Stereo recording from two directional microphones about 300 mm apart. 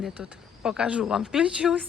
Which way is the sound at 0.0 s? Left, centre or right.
Centre.